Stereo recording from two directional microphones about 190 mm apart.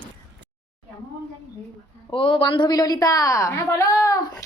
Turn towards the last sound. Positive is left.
turn(degrees=20)  # may be behind; listen again after turning